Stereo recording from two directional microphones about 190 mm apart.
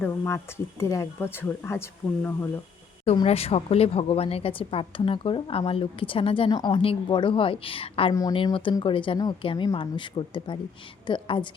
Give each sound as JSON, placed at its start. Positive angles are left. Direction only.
{"t": 0.0, "sound": "speech", "side_deg": 15}
{"t": 3.0, "sound": "a woman's voice", "side_deg": 35}